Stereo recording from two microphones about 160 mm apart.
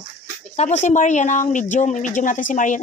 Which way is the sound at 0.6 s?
50° left (ahead or behind).